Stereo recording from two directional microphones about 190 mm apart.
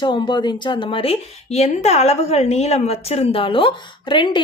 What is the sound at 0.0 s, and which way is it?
A woman's voice, 25° left (ahead or behind).